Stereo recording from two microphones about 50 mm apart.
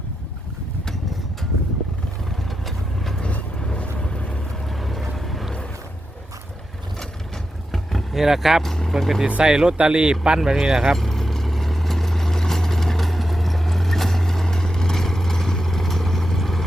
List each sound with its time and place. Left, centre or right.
2.6 s vehicle: centre
3.6 s vehicle: centre
4.7 s boat: centre
7.7 s vehicle: centre
8.6 s vehicle: centre
8.9 s speech: centre
9.2 s speech: centre
10.9 s vehicle: centre